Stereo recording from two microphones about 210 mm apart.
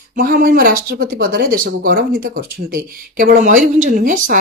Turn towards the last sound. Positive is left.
turn(degrees=-40)  # may be behind; listen again after turning